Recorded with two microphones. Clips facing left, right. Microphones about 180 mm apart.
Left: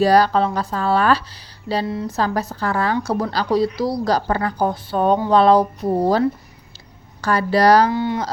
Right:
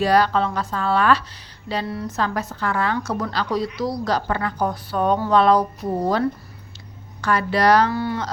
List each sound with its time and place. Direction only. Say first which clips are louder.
0.0 s a woman's voice: left 3 dB; 35° left (ahead or behind)
7.9 s speech: left 3 dB; 20° left (ahead or behind)